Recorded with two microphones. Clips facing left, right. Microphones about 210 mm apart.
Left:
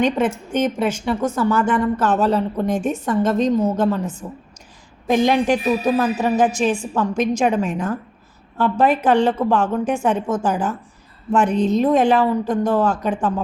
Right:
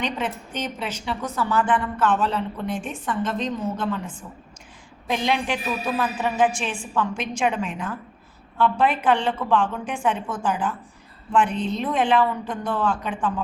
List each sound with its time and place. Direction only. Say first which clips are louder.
0.0 s a woman's voice: left 9 dB; 50° left (ahead or behind)